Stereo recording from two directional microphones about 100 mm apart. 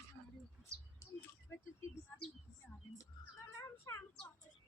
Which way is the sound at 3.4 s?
30° left (ahead or behind).